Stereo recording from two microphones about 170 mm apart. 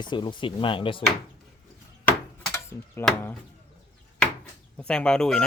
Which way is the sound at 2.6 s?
15° left (ahead or behind).